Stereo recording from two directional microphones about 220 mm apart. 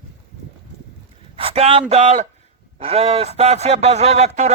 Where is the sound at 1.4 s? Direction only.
25° right (ahead or behind).